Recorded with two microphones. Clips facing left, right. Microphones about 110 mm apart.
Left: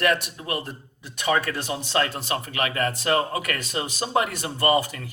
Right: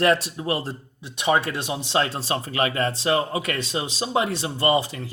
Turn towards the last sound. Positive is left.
turn(degrees=-25)  # may be behind; listen again after turning